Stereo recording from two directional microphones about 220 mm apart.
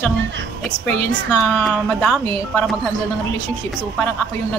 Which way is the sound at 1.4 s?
Centre (ahead or behind).